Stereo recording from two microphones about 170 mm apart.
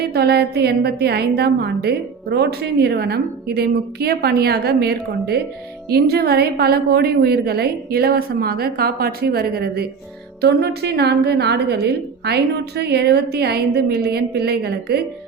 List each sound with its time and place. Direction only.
0.0 s a woman's voice: 70° right (ahead or behind)